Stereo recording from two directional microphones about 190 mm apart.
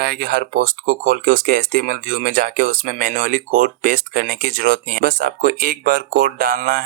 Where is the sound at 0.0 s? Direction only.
50° right (ahead or behind).